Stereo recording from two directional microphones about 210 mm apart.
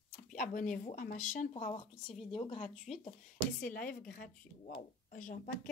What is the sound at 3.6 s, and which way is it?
A woman's voice, 40° left (ahead or behind).